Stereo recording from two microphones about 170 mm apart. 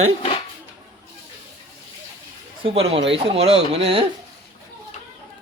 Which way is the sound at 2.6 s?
35° right (ahead or behind).